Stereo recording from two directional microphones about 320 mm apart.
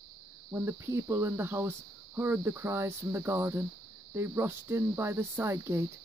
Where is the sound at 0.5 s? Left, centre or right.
Centre.